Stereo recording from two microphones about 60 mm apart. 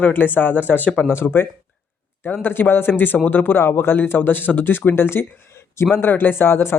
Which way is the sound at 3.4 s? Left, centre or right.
Left.